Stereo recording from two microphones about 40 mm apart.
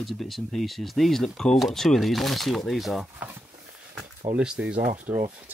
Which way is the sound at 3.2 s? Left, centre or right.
Right.